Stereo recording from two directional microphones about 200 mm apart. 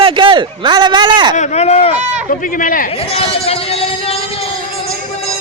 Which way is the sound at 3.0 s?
30° left (ahead or behind).